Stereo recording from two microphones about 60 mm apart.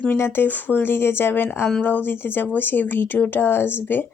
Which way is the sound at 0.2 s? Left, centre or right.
Left.